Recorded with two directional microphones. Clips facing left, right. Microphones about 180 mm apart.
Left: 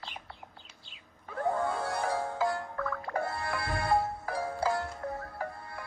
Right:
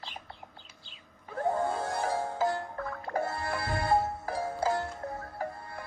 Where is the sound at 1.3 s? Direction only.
25° right (ahead or behind).